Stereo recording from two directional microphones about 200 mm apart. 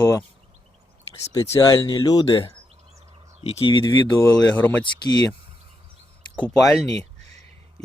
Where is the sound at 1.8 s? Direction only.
20° left (ahead or behind).